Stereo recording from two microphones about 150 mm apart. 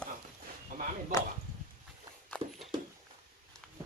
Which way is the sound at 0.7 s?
65° right (ahead or behind).